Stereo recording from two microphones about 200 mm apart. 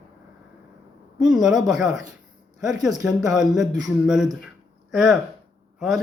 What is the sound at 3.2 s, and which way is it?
Speech, centre (ahead or behind).